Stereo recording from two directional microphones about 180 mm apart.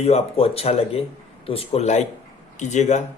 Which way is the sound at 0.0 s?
35° left (ahead or behind).